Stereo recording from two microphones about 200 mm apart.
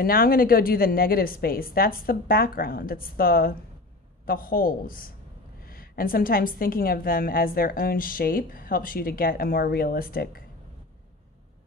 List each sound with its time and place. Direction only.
0.0 s a woman's voice: 45° left (ahead or behind)